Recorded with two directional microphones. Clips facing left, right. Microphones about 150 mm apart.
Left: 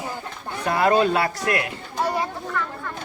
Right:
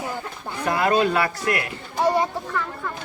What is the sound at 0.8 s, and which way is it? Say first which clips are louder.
Speech: left 2 dB; 25° left (ahead or behind).